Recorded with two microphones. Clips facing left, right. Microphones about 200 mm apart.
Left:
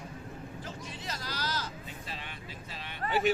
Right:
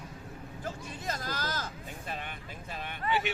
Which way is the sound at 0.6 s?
50° right (ahead or behind).